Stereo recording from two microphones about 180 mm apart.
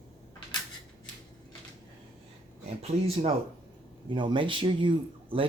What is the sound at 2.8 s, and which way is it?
Speech, 35° right (ahead or behind).